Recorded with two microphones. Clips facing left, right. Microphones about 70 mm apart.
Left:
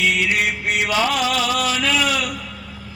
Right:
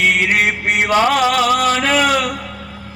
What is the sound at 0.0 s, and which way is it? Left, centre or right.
Chant, right.